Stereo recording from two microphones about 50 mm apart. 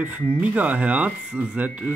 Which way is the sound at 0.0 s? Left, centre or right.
Right.